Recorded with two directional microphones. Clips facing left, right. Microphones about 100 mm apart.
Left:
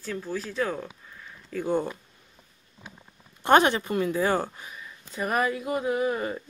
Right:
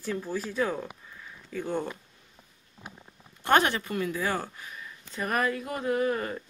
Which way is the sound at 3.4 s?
20° left (ahead or behind).